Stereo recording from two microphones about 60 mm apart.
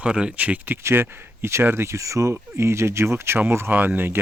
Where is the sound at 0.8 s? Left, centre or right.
Right.